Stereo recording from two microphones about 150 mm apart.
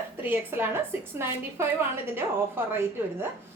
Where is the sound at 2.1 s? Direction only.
15° right (ahead or behind).